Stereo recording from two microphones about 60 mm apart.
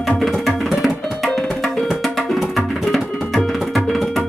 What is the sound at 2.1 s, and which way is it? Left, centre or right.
Tabla, centre.